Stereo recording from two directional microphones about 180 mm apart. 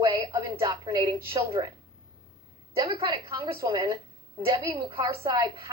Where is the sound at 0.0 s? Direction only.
20° right (ahead or behind).